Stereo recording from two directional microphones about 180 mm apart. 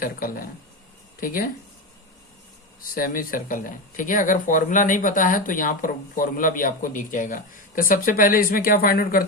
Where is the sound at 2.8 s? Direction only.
50° left (ahead or behind).